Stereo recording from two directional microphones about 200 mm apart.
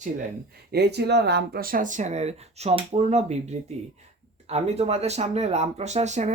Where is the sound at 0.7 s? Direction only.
55° right (ahead or behind); by 3.3 s 35° right (ahead or behind).